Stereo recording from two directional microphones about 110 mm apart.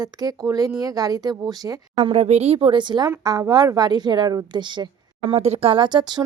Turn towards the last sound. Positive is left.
turn(degrees=-40)  # may be behind; listen again after turning